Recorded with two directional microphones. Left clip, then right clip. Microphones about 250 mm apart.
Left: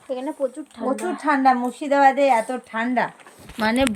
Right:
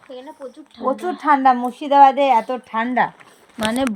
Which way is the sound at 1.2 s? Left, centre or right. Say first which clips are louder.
Right 4 dB; centre.